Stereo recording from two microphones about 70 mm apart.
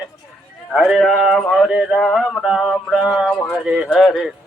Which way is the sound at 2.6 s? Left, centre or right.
Centre.